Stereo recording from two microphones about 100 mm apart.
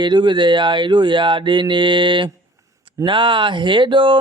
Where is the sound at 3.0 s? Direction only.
55° right (ahead or behind).